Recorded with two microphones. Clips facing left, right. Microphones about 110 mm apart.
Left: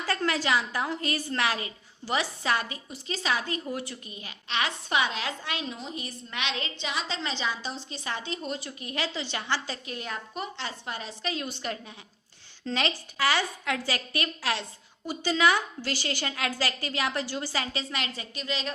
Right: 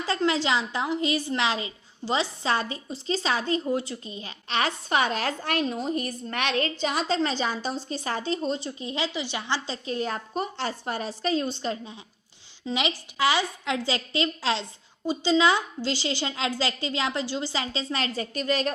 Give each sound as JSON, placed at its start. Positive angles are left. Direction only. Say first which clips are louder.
{"t": 0.0, "sound": "a woman's voice", "louder": "right 3 dB", "side_deg": -20}
{"t": 12.6, "sound": "a woman's voice", "louder": "right 1 dB", "side_deg": -15}